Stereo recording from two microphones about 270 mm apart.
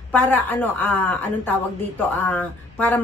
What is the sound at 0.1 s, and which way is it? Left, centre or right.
A woman's voice, centre.